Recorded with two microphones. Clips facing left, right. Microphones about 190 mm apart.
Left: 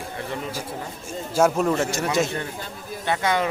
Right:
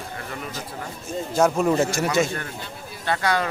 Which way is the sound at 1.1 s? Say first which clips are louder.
Even; 5° left (ahead or behind).